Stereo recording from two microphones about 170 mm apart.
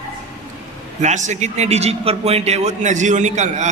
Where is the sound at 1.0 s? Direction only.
45° right (ahead or behind).